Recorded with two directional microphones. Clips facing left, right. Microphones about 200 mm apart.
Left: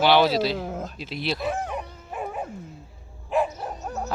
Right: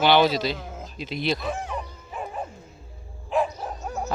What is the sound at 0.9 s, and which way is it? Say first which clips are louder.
Bow-wow: right 7 dB; 5° left (ahead or behind).